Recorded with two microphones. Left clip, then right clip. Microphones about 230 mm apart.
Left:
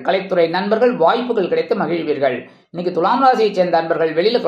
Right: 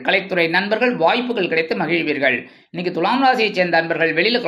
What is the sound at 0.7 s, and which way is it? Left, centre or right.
Speech, right.